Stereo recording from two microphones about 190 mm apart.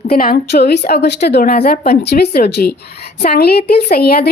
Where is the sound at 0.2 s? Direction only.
55° left (ahead or behind).